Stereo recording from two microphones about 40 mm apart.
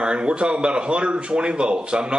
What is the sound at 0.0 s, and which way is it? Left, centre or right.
Speech, right.